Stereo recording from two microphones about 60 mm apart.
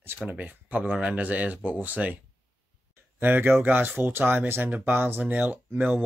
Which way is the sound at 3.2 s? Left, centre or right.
Right.